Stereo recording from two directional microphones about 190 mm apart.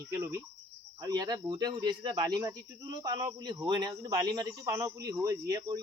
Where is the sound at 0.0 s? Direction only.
15° right (ahead or behind).